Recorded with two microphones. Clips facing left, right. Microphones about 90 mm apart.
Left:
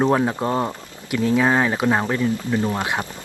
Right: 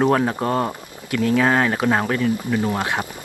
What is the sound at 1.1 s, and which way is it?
Speech, 20° left (ahead or behind).